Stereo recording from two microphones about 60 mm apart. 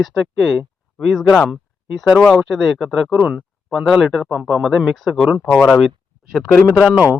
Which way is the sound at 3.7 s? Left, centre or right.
Centre.